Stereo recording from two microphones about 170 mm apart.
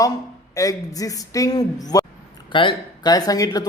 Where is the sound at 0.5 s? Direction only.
20° left (ahead or behind).